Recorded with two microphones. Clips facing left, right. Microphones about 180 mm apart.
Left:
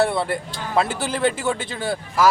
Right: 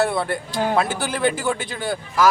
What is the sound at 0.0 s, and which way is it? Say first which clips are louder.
A man's voice: left 1 dB; centre (ahead or behind).